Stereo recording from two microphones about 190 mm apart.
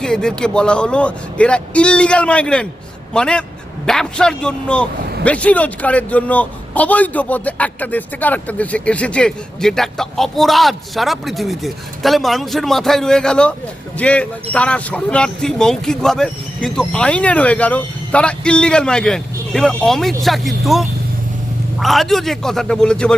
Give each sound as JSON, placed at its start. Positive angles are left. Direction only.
{"t": 0.0, "sound": "a man's voice", "side_deg": 5}